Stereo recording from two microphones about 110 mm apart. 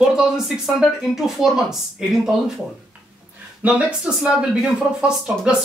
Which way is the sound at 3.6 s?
10° right (ahead or behind).